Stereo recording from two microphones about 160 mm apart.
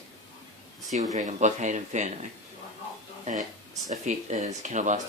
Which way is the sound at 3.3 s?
50° right (ahead or behind).